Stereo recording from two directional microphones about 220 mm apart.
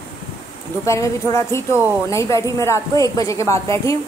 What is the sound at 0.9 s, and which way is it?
Speech, 15° left (ahead or behind).